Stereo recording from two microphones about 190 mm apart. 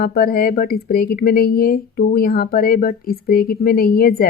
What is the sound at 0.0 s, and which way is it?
Speech, 55° left (ahead or behind).